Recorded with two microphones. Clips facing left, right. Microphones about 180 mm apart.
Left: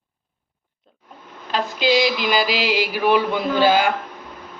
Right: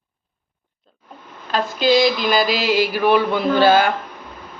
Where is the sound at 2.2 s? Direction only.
10° left (ahead or behind).